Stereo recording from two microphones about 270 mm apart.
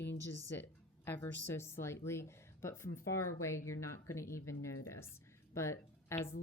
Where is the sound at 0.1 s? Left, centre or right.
Centre.